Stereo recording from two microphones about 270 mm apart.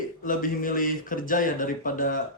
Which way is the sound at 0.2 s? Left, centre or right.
Left.